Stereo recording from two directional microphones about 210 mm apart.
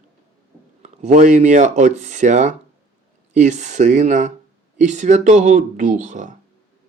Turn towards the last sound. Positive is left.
turn(degrees=-40)  # may be behind; listen again after turning